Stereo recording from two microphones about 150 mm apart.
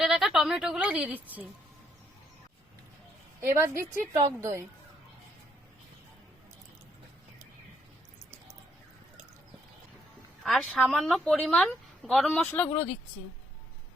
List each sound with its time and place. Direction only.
0.0 s speech: centre (ahead or behind)
3.4 s a woman's voice: 20° right (ahead or behind)
10.4 s a woman's voice: 5° left (ahead or behind)